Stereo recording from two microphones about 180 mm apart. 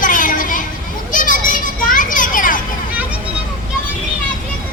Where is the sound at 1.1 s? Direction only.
45° left (ahead or behind).